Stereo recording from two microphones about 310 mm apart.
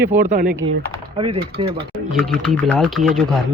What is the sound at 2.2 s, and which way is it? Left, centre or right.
Speech, centre.